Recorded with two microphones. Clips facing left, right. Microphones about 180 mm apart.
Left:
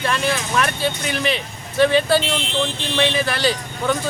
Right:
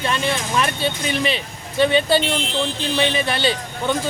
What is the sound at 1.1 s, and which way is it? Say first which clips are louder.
Speech: right 1 dB; centre (ahead or behind).